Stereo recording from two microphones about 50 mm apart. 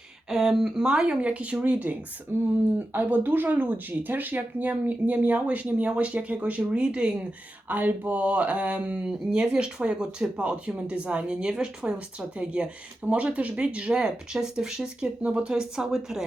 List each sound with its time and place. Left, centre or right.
0.3 s speech: centre; by 2.0 s right
2.3 s speech: right
7.7 s speech: right
13.9 s speech: centre
15.2 s speech: right